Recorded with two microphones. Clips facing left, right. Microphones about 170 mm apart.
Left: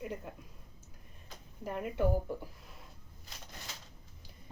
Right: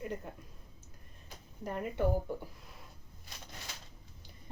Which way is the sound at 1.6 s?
5° left (ahead or behind).